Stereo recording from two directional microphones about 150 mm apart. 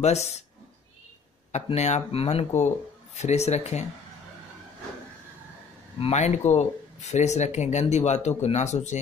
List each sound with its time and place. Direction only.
0.0 s speech: 45° left (ahead or behind)
1.5 s speech: 50° left (ahead or behind)
5.9 s speech: 45° left (ahead or behind)